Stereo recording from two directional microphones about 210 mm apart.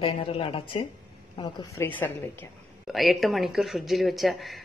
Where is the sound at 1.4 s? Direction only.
20° left (ahead or behind).